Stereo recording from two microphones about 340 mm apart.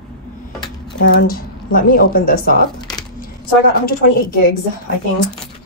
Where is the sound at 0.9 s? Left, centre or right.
Left.